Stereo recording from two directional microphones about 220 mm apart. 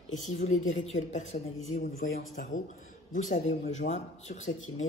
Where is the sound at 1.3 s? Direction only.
35° left (ahead or behind).